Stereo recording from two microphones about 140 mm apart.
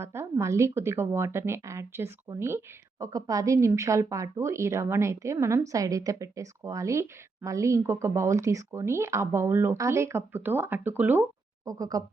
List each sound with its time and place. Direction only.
0.0 s a woman's voice: 20° right (ahead or behind)
11.6 s a woman's voice: 25° right (ahead or behind)